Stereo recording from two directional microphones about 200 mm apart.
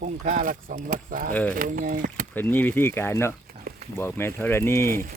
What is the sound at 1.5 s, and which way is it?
Speech, 45° right (ahead or behind).